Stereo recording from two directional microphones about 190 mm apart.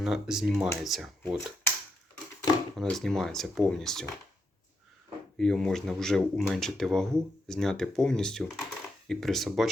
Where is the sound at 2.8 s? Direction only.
Centre (ahead or behind).